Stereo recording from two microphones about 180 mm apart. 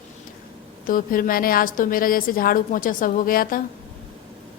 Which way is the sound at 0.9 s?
50° left (ahead or behind).